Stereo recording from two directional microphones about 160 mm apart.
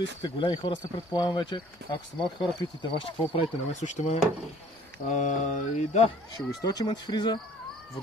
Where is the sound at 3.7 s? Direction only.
45° left (ahead or behind).